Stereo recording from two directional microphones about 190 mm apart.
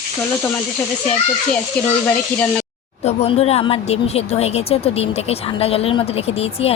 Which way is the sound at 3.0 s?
35° left (ahead or behind).